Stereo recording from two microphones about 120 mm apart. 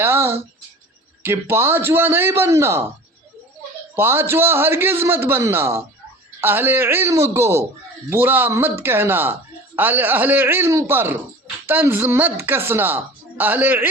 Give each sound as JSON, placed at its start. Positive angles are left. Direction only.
{"t": 0.0, "sound": "a sound", "side_deg": -20}
{"t": 1.2, "sound": "a man's voice", "side_deg": -20}
{"t": 3.9, "sound": "a man's voice", "side_deg": -20}